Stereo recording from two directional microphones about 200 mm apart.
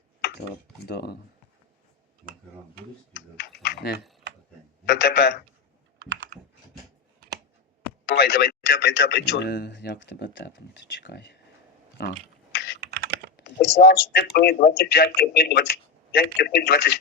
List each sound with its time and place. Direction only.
0.9 s speech: 55° left (ahead or behind)
3.3 s speech: 55° left (ahead or behind)
6.0 s computer keyboard: 65° right (ahead or behind)
7.8 s speech: 55° left (ahead or behind)
11.9 s a sound: 55° left (ahead or behind)
12.8 s computer keyboard: 55° right (ahead or behind)
13.7 s a man's voice: 55° left (ahead or behind)